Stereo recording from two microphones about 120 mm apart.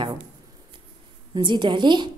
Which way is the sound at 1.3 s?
40° right (ahead or behind).